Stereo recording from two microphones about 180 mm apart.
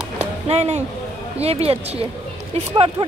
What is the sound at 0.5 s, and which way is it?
A woman's voice, 35° right (ahead or behind).